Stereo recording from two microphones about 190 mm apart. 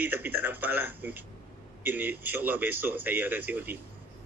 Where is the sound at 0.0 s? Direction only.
10° right (ahead or behind).